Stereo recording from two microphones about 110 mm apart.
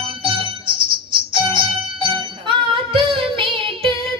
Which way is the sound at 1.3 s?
50° right (ahead or behind).